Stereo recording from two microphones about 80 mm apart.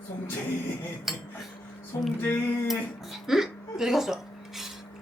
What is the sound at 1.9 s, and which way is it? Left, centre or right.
Music, left.